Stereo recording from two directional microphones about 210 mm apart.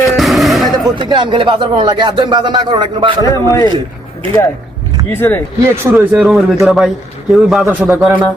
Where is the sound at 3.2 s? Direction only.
15° left (ahead or behind).